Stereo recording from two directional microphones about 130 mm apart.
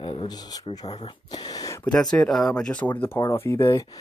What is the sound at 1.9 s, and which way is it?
Speech, 5° left (ahead or behind).